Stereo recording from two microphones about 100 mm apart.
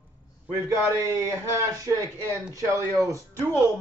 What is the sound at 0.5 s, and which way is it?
A man's voice, 30° right (ahead or behind).